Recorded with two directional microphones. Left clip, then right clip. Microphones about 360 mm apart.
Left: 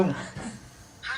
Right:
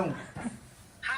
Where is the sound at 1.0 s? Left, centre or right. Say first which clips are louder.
Right 1 dB; right.